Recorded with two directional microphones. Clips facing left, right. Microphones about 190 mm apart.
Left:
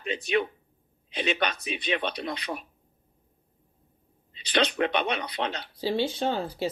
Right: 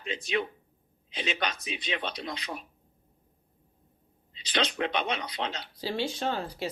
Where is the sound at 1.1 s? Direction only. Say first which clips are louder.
Left 4 dB; 60° left (ahead or behind).